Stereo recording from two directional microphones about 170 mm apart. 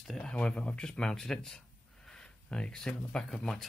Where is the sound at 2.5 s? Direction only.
5° left (ahead or behind).